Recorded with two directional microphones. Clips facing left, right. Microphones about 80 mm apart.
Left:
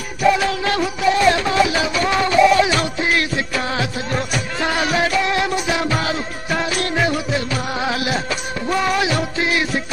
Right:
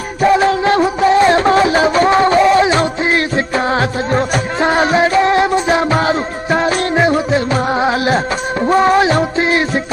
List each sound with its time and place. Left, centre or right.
0.2 s music: right